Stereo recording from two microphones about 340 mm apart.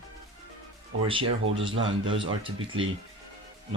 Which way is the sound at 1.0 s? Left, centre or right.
Centre.